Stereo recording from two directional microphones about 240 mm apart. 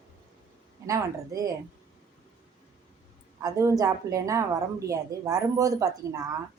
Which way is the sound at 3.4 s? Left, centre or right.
Centre.